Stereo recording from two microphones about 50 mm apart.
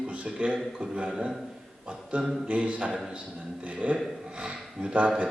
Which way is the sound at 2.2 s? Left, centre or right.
Centre.